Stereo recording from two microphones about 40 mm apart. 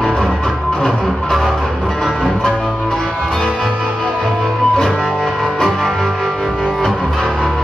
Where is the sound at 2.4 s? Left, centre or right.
Centre.